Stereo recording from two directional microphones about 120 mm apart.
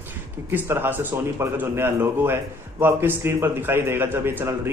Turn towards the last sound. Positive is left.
turn(degrees=-20)  # may be behind; listen again after turning